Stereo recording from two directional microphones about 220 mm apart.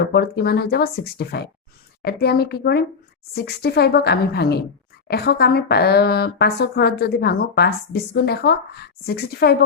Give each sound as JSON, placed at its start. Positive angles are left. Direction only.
{"t": 0.1, "sound": "speech", "side_deg": 45}